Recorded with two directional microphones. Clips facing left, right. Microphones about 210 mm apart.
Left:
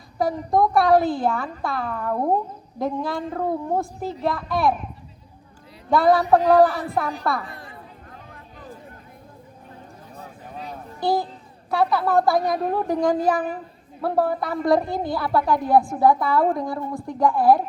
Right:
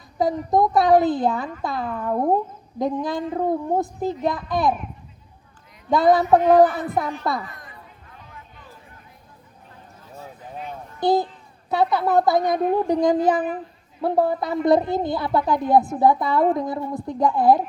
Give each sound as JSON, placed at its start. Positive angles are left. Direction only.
{"t": 0.2, "sound": "a woman's voice", "side_deg": -20}
{"t": 5.9, "sound": "a woman's voice", "side_deg": -20}
{"t": 7.4, "sound": "chatter", "side_deg": 30}
{"t": 10.2, "sound": "a sound", "side_deg": 35}
{"t": 11.0, "sound": "a woman's voice", "side_deg": -20}